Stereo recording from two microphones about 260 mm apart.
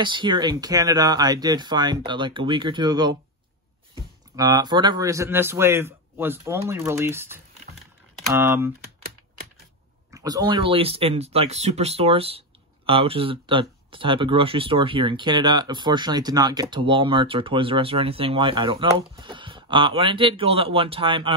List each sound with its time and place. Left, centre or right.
0.0 s speech: centre
4.4 s speech: centre
10.1 s speech: centre